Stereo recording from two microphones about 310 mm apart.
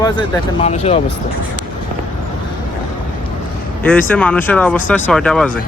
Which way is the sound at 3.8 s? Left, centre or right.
Centre.